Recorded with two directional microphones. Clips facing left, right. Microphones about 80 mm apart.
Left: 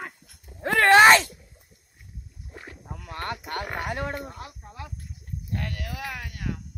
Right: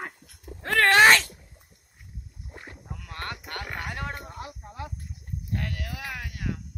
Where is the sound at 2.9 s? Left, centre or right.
Centre.